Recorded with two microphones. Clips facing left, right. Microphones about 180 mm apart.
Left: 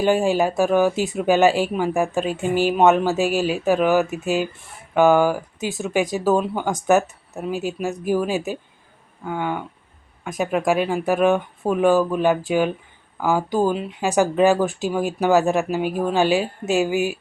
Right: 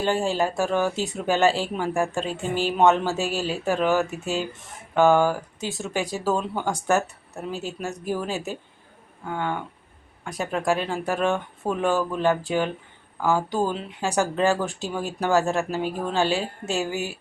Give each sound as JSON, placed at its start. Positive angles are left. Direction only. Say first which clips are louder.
{"t": 0.0, "sound": "speech", "louder": "left 5 dB", "side_deg": 15}